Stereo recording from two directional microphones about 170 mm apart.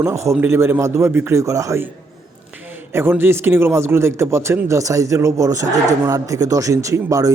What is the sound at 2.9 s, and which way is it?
A man's voice, 15° right (ahead or behind).